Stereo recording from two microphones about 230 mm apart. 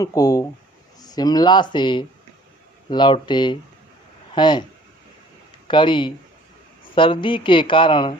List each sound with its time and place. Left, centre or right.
0.0 s speech: centre
5.6 s speech: left